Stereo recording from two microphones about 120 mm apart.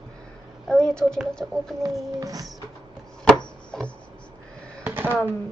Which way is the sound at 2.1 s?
30° right (ahead or behind).